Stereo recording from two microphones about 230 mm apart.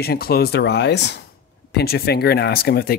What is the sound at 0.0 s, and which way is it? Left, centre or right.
Speech, left.